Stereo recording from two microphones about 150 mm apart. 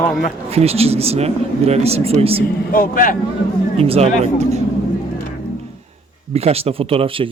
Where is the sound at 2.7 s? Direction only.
70° left (ahead or behind).